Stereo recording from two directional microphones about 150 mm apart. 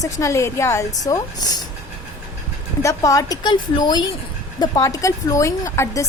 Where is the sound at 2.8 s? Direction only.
20° left (ahead or behind).